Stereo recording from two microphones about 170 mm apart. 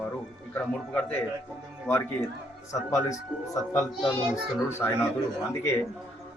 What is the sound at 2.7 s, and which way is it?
A child's voice, 20° left (ahead or behind).